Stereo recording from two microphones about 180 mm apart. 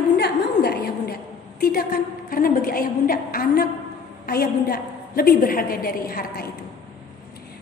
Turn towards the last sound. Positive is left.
turn(degrees=55)  # may be behind; listen again after turning